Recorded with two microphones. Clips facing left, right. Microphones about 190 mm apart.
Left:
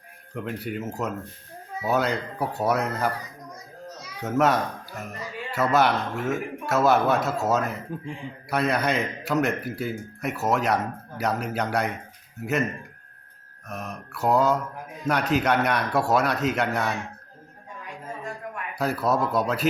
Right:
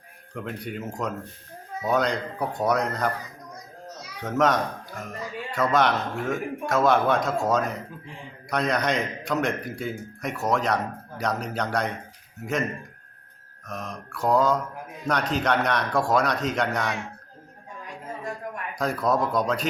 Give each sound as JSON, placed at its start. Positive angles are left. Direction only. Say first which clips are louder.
{"t": 0.3, "sound": "speech", "louder": "left 2 dB", "side_deg": 5}
{"t": 4.2, "sound": "a man's voice", "louder": "left 1 dB", "side_deg": 5}
{"t": 13.7, "sound": "a man's voice", "louder": "even", "side_deg": 5}
{"t": 18.8, "sound": "speech", "louder": "even", "side_deg": 5}